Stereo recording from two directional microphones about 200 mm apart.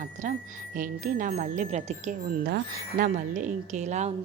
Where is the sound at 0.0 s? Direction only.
40° right (ahead or behind).